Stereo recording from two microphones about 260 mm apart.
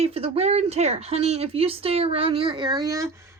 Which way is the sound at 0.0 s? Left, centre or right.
Right.